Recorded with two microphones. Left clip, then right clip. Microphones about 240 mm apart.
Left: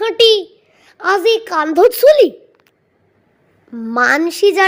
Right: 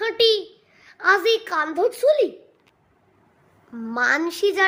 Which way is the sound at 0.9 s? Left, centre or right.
Left.